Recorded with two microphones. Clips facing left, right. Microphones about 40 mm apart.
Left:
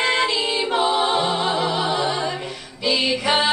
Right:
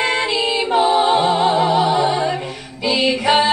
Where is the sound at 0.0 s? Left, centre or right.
Centre.